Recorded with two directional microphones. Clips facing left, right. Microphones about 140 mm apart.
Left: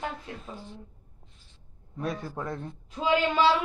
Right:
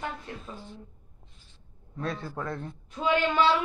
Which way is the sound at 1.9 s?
15° left (ahead or behind).